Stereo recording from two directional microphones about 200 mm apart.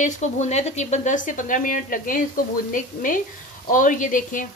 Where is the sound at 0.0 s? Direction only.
35° left (ahead or behind).